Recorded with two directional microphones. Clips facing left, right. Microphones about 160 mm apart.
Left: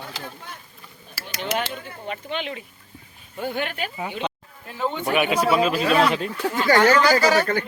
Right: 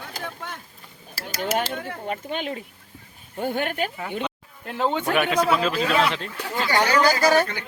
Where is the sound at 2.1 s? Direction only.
45° right (ahead or behind).